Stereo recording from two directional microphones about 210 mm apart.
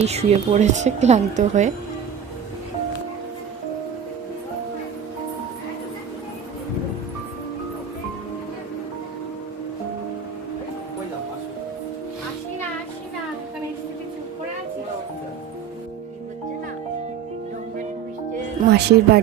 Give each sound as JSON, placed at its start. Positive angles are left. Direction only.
{"t": 0.0, "sound": "a woman's voice", "side_deg": -30}
{"t": 18.7, "sound": "speech", "side_deg": -50}